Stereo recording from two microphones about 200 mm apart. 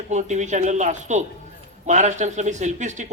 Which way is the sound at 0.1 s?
35° right (ahead or behind).